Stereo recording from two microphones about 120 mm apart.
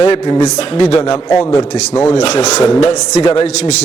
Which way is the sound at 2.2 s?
70° left (ahead or behind).